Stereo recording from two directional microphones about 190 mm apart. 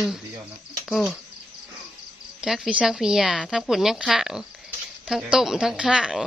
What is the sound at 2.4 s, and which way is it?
A woman's voice, centre (ahead or behind).